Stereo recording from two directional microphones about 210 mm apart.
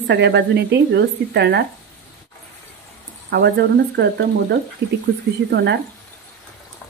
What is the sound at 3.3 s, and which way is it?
Speech, 50° right (ahead or behind).